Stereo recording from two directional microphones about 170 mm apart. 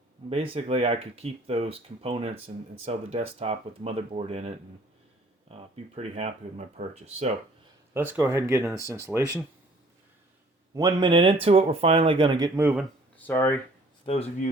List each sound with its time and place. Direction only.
0.3 s speech: 35° right (ahead or behind)
7.9 s speech: 10° right (ahead or behind)
10.8 s speech: 25° right (ahead or behind)
12.5 s speech: 10° right (ahead or behind)
13.1 s speech: 10° left (ahead or behind)
14.0 s speech: 35° left (ahead or behind)